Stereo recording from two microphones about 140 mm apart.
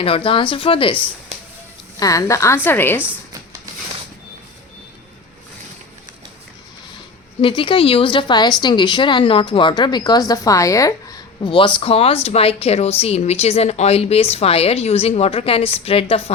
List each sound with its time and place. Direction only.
0.0 s a woman's voice: 40° left (ahead or behind)
2.0 s a woman's voice: 25° left (ahead or behind)
7.4 s a woman's voice: 35° left (ahead or behind)
11.3 s speech: 35° left (ahead or behind)